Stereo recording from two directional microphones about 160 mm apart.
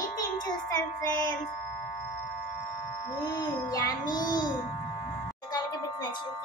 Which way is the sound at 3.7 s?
20° left (ahead or behind).